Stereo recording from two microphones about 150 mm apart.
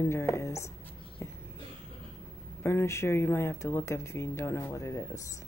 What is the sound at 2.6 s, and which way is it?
Speech, 15° left (ahead or behind).